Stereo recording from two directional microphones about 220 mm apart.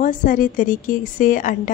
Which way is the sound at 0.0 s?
40° left (ahead or behind).